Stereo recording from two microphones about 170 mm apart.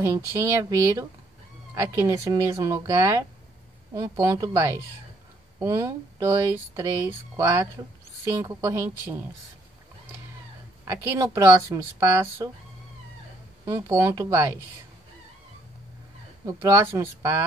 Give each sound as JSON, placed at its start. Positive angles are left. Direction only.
{"t": 0.0, "sound": "speech", "side_deg": -15}
{"t": 10.9, "sound": "speech", "side_deg": -20}
{"t": 13.7, "sound": "speech", "side_deg": -20}
{"t": 16.4, "sound": "speech", "side_deg": -15}